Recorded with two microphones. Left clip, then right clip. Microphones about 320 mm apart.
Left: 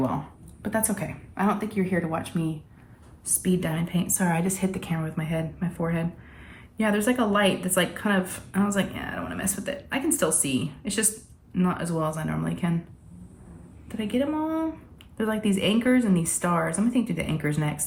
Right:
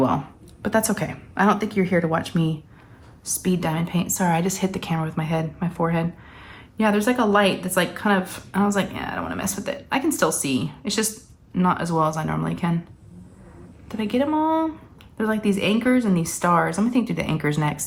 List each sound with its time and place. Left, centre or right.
0.6 s a woman's voice: centre
3.4 s a woman's voice: centre
13.8 s speech: centre